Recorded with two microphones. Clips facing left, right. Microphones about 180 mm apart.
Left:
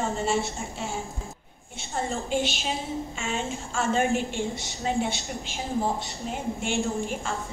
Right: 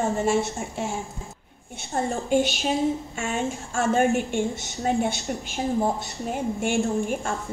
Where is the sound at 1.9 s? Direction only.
45° right (ahead or behind).